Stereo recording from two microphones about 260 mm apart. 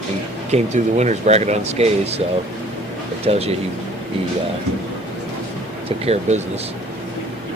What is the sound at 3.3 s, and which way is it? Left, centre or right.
Speech, right.